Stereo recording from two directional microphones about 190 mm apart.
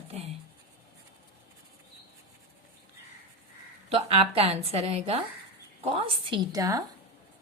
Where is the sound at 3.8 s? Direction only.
30° right (ahead or behind).